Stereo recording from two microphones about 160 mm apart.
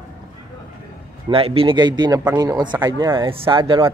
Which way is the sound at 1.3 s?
35° right (ahead or behind).